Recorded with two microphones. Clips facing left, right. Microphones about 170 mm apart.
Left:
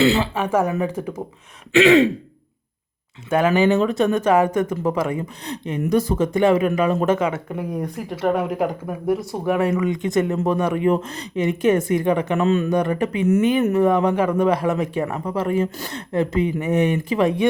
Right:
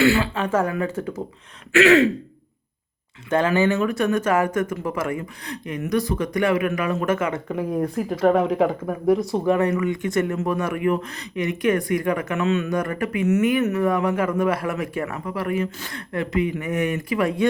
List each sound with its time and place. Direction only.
0.0 s speech: 20° left (ahead or behind)
3.2 s speech: 10° left (ahead or behind)
7.3 s speech: centre (ahead or behind)
9.7 s speech: 20° left (ahead or behind)
12.7 s speech: 20° left (ahead or behind)